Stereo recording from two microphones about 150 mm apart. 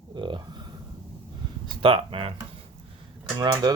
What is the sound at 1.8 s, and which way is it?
Speech, 35° right (ahead or behind).